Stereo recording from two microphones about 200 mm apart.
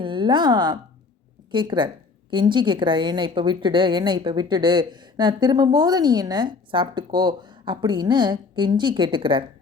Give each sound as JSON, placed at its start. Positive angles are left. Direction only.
{"t": 0.0, "sound": "a woman's voice", "side_deg": -25}